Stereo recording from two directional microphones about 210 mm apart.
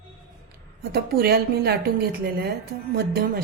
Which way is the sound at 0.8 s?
50° right (ahead or behind).